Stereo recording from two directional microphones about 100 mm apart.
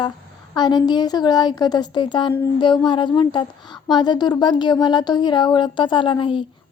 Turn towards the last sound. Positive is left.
turn(degrees=55)  # may be behind; listen again after turning